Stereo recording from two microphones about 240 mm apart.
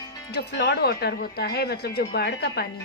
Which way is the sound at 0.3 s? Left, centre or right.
Left.